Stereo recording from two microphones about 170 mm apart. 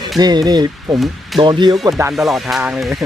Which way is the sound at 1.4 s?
25° right (ahead or behind).